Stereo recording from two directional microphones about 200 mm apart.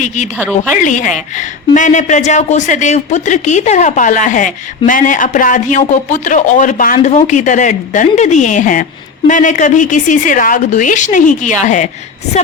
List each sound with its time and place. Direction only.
0.8 s a man's voice: 40° left (ahead or behind)